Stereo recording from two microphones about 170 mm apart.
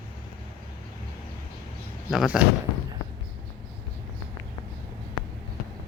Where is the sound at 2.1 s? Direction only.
Centre (ahead or behind).